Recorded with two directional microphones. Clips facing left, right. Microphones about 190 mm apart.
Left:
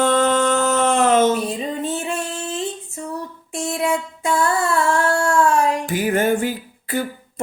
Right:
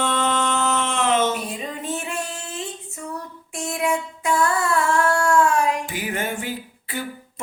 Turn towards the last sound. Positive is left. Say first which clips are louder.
# left 9 dB
turn(degrees=45)  # may be behind; listen again after turning